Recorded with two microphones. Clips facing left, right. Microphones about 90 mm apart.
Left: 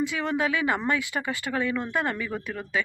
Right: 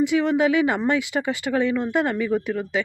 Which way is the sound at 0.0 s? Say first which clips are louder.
Right 7 dB; 20° right (ahead or behind).